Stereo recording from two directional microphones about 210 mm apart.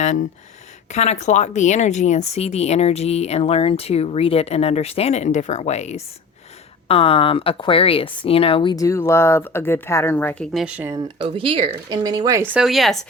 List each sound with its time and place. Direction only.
0.9 s speech: 35° left (ahead or behind); by 10.9 s 5° right (ahead or behind)
10.9 s speech: 25° right (ahead or behind)
12.5 s speech: centre (ahead or behind)